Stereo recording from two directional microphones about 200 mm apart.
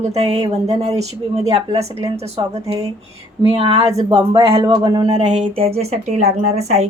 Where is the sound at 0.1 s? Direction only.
30° right (ahead or behind).